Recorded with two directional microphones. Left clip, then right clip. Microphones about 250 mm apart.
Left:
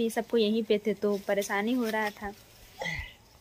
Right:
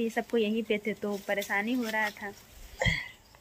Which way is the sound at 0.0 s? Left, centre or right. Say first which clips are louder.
Left 2 dB; centre.